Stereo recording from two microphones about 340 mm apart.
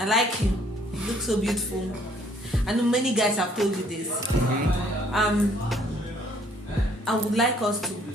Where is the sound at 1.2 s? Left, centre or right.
Centre.